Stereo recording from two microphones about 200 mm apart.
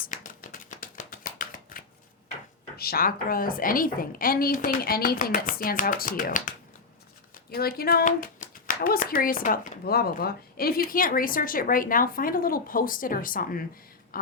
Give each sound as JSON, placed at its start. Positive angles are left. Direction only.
{"t": 0.0, "sound": "a sound", "side_deg": 45}
{"t": 2.7, "sound": "speech", "side_deg": 50}
{"t": 7.5, "sound": "speech", "side_deg": 50}